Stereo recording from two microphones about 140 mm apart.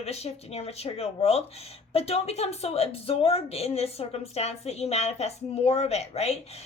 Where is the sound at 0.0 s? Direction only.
50° left (ahead or behind).